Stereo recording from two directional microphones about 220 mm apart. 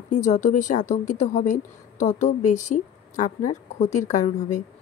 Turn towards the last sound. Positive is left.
turn(degrees=35)  # may be behind; listen again after turning